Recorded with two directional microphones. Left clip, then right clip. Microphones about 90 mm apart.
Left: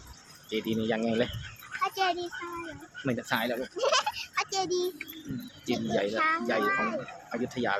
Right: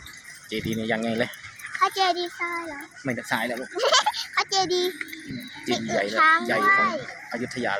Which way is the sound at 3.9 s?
70° right (ahead or behind).